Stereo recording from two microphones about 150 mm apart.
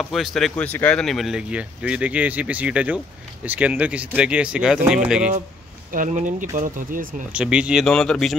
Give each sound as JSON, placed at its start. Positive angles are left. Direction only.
{"t": 0.0, "sound": "speech", "side_deg": 0}
{"t": 5.9, "sound": "speech", "side_deg": -60}
{"t": 7.3, "sound": "speech", "side_deg": -5}